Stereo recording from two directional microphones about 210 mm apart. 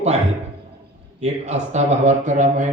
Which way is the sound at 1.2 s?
30° right (ahead or behind).